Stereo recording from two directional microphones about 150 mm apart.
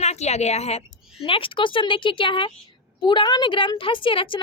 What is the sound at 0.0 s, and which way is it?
A woman's voice, 45° left (ahead or behind).